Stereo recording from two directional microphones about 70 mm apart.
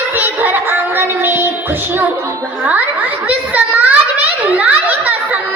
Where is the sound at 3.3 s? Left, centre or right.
Right.